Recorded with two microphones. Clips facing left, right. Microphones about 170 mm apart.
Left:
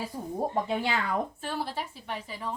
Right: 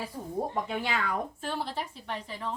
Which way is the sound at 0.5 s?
30° left (ahead or behind).